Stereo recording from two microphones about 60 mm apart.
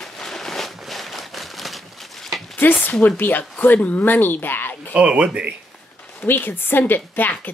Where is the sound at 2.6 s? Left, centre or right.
Left.